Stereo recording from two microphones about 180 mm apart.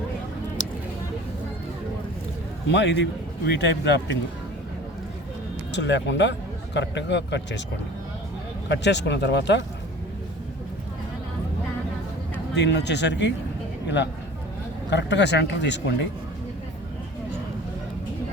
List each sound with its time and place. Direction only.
2.7 s a man's voice: 75° left (ahead or behind)
5.7 s a man's voice: 80° left
8.7 s a man's voice: 75° left (ahead or behind)
12.5 s a man's voice: 70° left (ahead or behind)